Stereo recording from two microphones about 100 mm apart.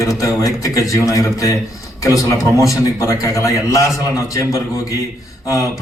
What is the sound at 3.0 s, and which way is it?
A man's voice, 35° left (ahead or behind).